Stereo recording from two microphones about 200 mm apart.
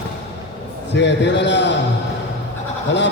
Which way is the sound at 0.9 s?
60° left (ahead or behind).